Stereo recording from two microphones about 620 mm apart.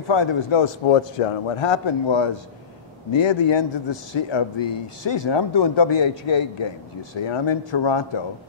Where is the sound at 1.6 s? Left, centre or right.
Left.